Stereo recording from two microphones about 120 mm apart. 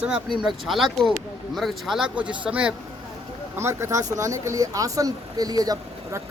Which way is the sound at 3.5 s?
20° right (ahead or behind).